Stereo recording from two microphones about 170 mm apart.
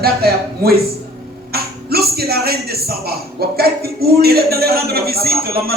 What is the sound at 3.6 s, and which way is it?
A man's voice, 65° right (ahead or behind).